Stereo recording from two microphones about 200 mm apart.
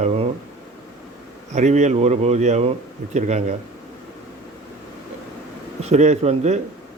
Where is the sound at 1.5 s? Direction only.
35° right (ahead or behind).